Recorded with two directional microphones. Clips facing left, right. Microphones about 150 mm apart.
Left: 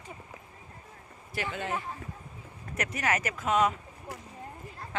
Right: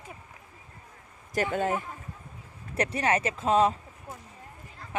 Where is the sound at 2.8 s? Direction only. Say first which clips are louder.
Right 4 dB; 30° right (ahead or behind).